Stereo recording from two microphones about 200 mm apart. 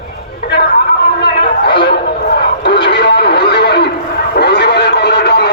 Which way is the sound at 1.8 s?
55° left (ahead or behind).